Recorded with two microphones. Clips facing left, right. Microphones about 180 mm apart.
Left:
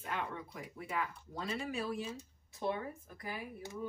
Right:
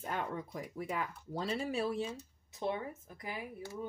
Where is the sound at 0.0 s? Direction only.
35° right (ahead or behind).